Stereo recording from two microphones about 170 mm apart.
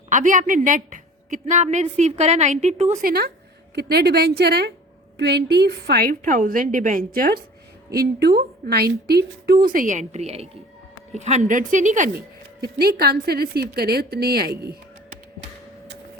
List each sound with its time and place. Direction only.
0.1 s a woman's voice: 50° right (ahead or behind)
3.0 s a woman's voice: 65° right (ahead or behind); by 12.1 s 45° right (ahead or behind)
12.6 s speech: 65° right (ahead or behind)